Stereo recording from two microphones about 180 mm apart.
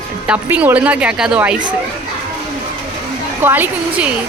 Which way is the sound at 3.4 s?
10° right (ahead or behind).